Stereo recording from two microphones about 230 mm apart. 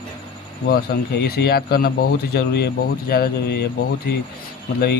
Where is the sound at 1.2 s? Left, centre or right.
Left.